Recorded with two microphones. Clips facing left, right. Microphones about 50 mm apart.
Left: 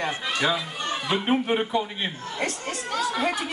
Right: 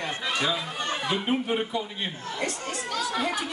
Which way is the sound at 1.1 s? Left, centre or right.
Left.